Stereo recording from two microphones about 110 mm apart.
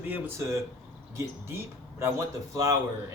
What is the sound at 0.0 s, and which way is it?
Mantra, 15° right (ahead or behind).